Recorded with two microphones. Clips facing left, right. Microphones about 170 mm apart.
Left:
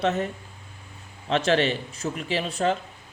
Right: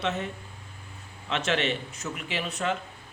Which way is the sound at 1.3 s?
35° left (ahead or behind).